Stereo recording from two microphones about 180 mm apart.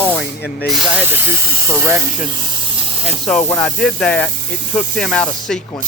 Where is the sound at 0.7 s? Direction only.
10° right (ahead or behind).